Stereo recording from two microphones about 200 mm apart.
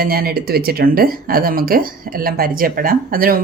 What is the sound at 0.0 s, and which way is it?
Speech, 50° right (ahead or behind).